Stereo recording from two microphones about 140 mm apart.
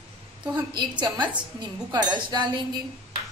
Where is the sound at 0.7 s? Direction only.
30° right (ahead or behind).